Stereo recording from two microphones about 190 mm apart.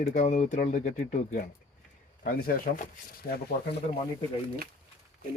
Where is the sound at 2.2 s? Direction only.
50° left (ahead or behind).